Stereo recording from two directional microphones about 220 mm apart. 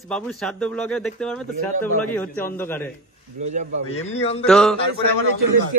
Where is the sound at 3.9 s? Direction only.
30° left (ahead or behind).